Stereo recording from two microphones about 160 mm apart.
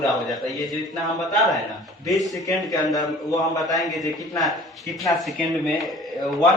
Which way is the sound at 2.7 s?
20° left (ahead or behind).